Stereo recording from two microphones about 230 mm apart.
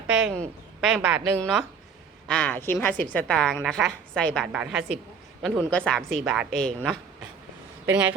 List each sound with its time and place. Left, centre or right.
0.1 s a woman's voice: centre